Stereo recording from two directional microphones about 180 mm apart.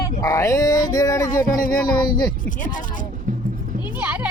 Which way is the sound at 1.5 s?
50° left (ahead or behind).